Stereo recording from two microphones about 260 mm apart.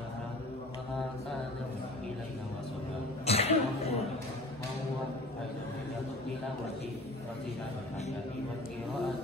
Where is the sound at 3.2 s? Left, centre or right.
Left.